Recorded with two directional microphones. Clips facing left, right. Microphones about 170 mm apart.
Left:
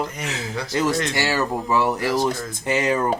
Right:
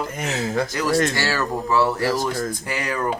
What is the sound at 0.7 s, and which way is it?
Speech, 25° left (ahead or behind).